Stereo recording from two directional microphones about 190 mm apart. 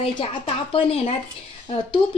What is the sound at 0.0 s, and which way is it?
Speech, 30° left (ahead or behind).